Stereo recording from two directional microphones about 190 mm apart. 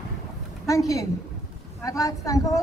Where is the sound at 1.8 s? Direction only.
15° left (ahead or behind).